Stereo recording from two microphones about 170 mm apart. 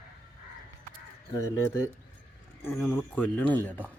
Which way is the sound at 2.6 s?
10° left (ahead or behind).